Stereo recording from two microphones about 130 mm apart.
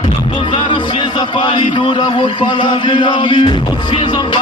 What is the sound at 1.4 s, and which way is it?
Chant, 40° left (ahead or behind).